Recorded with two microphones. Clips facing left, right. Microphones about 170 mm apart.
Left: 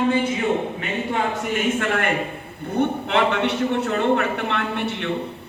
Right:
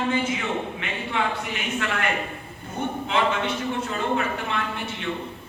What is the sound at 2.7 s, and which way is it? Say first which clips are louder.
A man's voice: left 6 dB; 65° left (ahead or behind).